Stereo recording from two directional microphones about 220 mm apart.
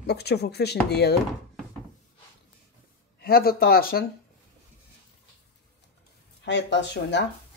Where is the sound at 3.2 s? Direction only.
45° left (ahead or behind).